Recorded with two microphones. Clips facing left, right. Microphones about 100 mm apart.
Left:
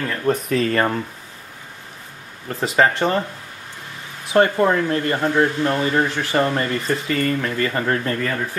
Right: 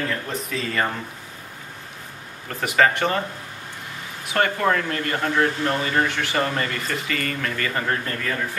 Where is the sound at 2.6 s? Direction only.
25° left (ahead or behind).